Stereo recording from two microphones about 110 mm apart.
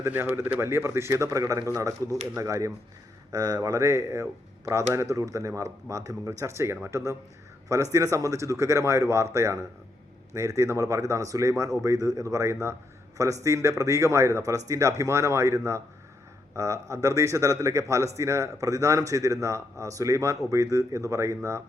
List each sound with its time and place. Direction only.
0.0 s a man's voice: 20° right (ahead or behind)